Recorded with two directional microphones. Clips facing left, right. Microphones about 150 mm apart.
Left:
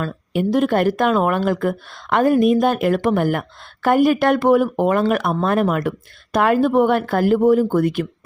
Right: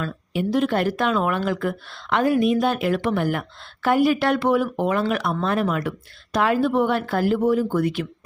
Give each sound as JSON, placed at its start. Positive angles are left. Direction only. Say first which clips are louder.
{"t": 0.0, "sound": "speech", "louder": "left 4 dB", "side_deg": 50}